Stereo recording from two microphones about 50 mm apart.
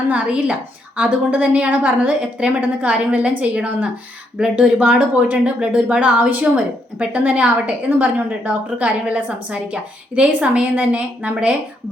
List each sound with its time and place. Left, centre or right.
0.1 s a woman's voice: right